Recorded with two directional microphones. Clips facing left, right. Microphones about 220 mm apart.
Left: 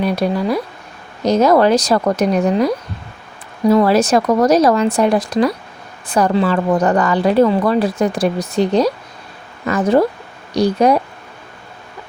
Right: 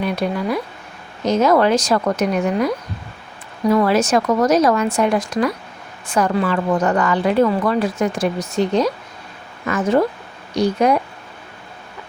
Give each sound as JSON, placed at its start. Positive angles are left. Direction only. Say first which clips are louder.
{"t": 0.0, "sound": "a woman's voice", "louder": "left 4 dB", "side_deg": 35}